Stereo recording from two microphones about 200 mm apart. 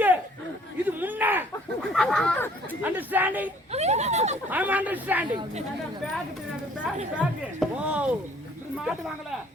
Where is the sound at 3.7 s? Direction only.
35° right (ahead or behind).